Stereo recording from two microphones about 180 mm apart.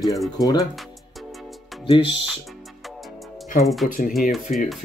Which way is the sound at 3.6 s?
Centre (ahead or behind).